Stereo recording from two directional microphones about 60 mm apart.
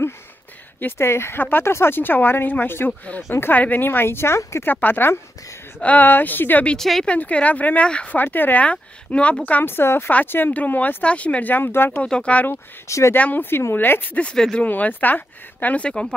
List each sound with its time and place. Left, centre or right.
0.9 s speech: left
4.4 s speech: left
4.6 s speech: left
6.8 s speech: centre
7.1 s speech: left
8.2 s speech: left
9.5 s speech: left
12.0 s speech: centre
12.8 s speech: left
13.1 s speech: left
14.3 s speech: centre
14.6 s speech: left
15.9 s speech: centre